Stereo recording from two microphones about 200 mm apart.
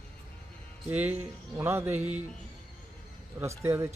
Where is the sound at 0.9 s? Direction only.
10° right (ahead or behind).